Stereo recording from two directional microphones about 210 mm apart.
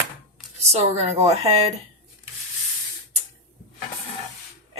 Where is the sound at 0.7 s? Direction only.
30° right (ahead or behind).